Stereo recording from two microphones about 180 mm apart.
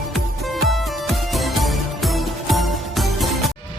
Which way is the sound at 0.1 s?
Centre (ahead or behind).